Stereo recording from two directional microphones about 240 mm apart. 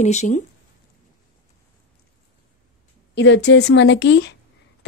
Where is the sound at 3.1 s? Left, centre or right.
Left.